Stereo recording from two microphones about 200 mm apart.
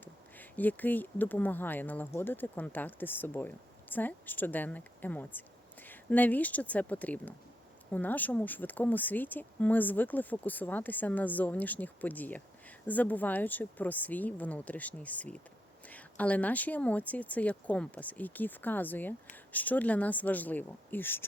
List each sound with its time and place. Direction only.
0.0 s speech: 10° left (ahead or behind)